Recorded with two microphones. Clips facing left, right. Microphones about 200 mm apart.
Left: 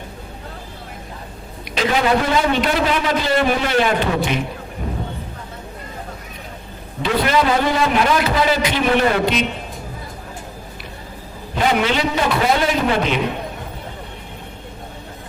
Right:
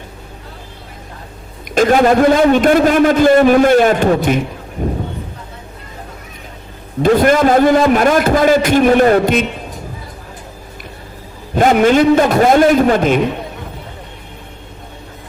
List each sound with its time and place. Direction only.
1.7 s a man's voice: 50° right (ahead or behind)
7.0 s a man's voice: 50° right (ahead or behind)
11.5 s a man's voice: 45° right (ahead or behind)